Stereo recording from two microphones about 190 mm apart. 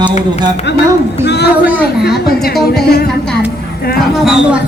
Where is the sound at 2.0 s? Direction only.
55° left (ahead or behind).